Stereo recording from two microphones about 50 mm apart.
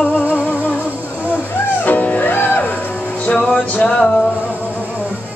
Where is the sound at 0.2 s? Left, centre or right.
Right.